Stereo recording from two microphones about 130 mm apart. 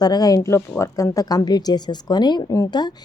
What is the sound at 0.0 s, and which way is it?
A woman's voice, 30° left (ahead or behind).